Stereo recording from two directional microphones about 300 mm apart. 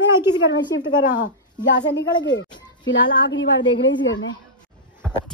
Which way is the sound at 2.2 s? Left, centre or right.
Left.